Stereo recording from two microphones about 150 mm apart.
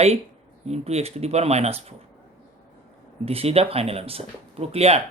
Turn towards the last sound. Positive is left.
turn(degrees=-45)  # may be behind; listen again after turning